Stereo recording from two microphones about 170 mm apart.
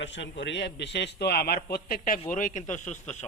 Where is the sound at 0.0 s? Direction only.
90° left.